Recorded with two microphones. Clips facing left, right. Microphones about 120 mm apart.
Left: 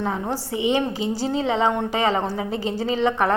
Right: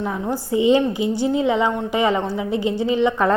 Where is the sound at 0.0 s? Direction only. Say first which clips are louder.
Right 1 dB; 25° left (ahead or behind).